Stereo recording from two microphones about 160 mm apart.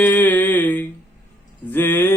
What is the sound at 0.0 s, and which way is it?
Mantra, 10° left (ahead or behind).